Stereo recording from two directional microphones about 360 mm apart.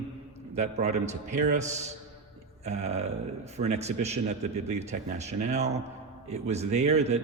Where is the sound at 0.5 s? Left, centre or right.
Centre.